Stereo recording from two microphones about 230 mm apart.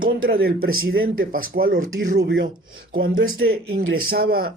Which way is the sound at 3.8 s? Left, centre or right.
Right.